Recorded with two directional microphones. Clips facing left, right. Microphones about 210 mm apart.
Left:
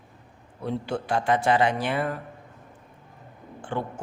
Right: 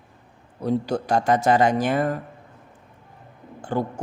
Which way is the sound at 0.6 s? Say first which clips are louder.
Right 5 dB; 40° right (ahead or behind).